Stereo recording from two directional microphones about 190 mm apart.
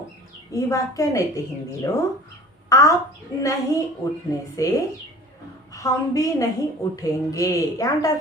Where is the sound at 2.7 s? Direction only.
15° left (ahead or behind).